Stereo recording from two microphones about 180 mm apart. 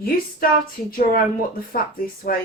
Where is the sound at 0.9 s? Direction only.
55° left (ahead or behind).